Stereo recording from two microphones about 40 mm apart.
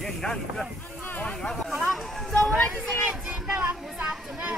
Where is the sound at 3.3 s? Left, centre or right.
Right.